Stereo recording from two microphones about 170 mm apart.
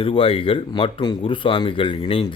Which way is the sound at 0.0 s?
30° left (ahead or behind).